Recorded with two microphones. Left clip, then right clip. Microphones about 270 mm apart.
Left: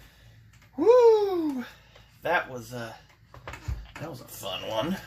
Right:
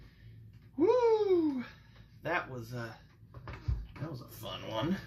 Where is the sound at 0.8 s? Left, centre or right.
Left.